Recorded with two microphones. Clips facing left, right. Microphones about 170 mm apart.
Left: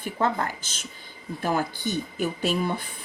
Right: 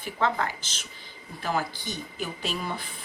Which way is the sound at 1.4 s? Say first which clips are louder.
Left 3 dB; 50° left (ahead or behind).